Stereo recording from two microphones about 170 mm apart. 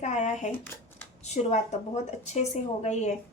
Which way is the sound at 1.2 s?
40° left (ahead or behind).